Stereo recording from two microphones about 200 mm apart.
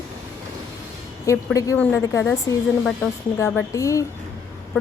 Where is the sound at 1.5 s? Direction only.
15° left (ahead or behind).